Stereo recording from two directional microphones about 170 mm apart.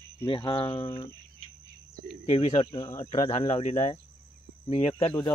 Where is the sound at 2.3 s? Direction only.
35° left (ahead or behind).